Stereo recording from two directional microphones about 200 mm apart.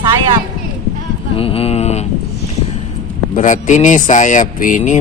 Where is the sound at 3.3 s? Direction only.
40° left (ahead or behind).